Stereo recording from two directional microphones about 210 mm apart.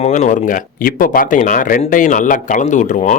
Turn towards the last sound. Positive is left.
turn(degrees=35)  # may be behind; listen again after turning